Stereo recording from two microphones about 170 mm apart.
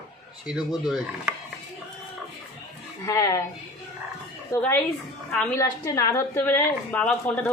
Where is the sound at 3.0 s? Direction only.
20° left (ahead or behind).